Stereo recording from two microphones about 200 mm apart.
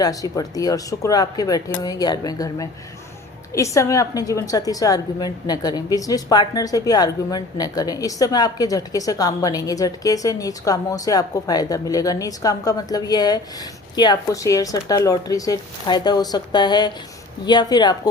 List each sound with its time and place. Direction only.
0.0 s a woman's voice: 20° left (ahead or behind)